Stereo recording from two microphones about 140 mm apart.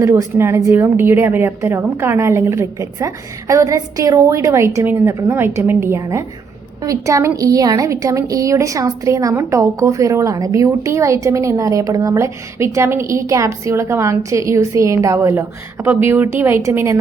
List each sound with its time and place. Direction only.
0.0 s speech: 20° right (ahead or behind)